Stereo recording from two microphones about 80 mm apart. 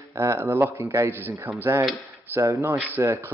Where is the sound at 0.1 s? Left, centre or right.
Right.